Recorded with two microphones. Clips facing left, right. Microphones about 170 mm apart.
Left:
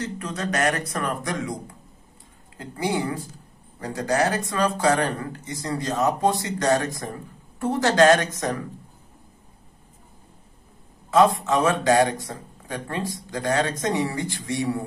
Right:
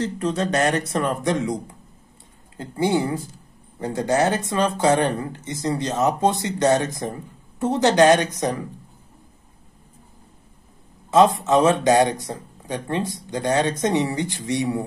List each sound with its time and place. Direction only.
0.0 s speech: 30° right (ahead or behind)
11.1 s speech: 20° right (ahead or behind)